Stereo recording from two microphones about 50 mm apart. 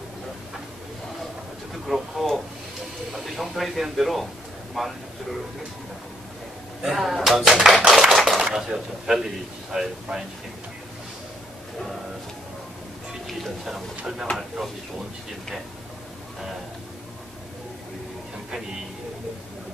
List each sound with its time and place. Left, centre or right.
1.9 s speech: centre
6.8 s speech: centre
13.3 s speech: centre